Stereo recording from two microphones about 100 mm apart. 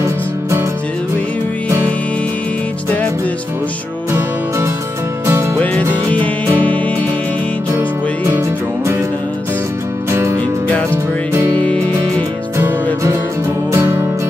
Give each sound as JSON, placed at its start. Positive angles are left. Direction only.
{"t": 0.0, "sound": "music", "side_deg": -30}
{"t": 5.2, "sound": "music", "side_deg": -25}
{"t": 5.6, "sound": "music", "side_deg": 15}
{"t": 8.3, "sound": "music", "side_deg": -25}
{"t": 10.1, "sound": "music", "side_deg": -30}
{"t": 11.5, "sound": "music", "side_deg": 10}
{"t": 13.7, "sound": "music", "side_deg": -25}